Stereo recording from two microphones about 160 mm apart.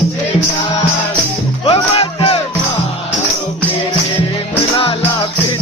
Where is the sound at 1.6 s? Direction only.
35° left (ahead or behind).